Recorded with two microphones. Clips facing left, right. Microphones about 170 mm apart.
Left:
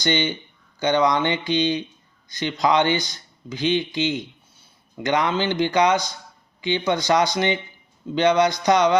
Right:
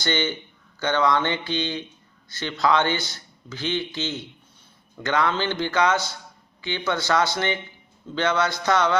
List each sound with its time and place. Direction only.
0.0 s speech: 15° left (ahead or behind)